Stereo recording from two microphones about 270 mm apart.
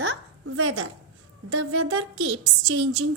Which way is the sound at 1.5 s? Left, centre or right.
Right.